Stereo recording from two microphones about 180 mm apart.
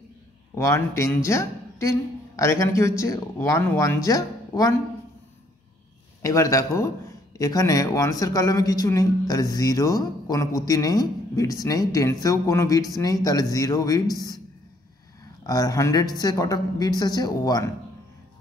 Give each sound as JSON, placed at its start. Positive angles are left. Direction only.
{"t": 0.6, "sound": "speech", "side_deg": 15}
{"t": 6.2, "sound": "speech", "side_deg": 20}
{"t": 15.4, "sound": "speech", "side_deg": 20}